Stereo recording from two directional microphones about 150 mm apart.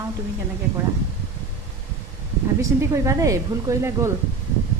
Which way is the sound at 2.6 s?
20° right (ahead or behind).